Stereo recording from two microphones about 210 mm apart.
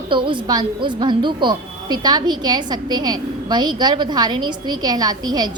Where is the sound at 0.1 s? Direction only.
25° right (ahead or behind).